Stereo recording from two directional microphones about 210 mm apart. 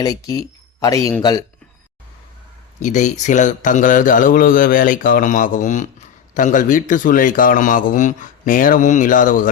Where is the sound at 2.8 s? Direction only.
35° left (ahead or behind).